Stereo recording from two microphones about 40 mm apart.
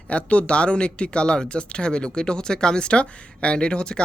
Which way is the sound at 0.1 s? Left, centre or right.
Left.